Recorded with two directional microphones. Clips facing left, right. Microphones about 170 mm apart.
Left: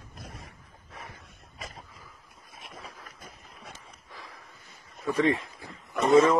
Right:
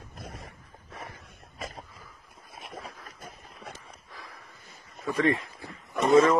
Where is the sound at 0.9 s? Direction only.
65° right (ahead or behind).